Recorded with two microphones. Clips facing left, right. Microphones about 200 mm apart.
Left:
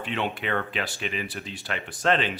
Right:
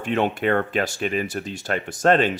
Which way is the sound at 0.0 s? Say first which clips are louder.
Right 8 dB; 45° right (ahead or behind).